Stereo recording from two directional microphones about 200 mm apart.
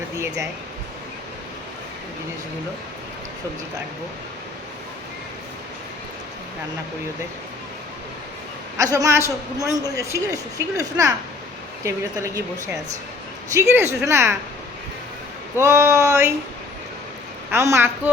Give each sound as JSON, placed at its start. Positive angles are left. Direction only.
{"t": 8.8, "sound": "a woman's voice", "side_deg": -15}
{"t": 15.5, "sound": "a woman's voice", "side_deg": -15}
{"t": 17.5, "sound": "a woman's voice", "side_deg": -15}